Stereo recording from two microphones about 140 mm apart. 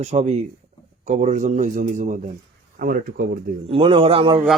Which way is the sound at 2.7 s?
90° right.